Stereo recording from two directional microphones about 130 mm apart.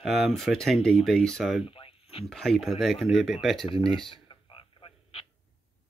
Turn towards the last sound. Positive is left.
turn(degrees=45)  # may be behind; listen again after turning